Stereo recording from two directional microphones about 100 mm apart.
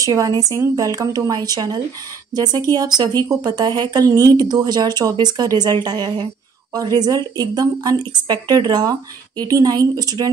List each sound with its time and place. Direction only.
0.0 s a woman's voice: 35° right (ahead or behind)